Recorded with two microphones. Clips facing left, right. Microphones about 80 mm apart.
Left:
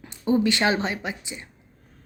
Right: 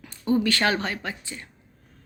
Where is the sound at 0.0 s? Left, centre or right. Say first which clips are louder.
Left 2 dB; centre.